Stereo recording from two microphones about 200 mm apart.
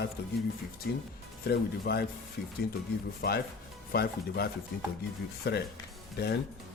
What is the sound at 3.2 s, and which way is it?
Speech, 45° left (ahead or behind).